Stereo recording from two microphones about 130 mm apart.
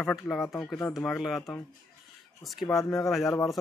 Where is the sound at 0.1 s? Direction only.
Centre (ahead or behind).